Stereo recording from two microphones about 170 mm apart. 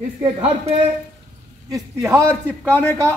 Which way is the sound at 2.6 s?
10° left (ahead or behind).